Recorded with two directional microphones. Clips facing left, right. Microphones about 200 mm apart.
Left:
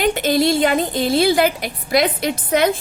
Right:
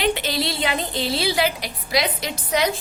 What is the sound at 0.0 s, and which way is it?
A woman's voice, 50° left (ahead or behind).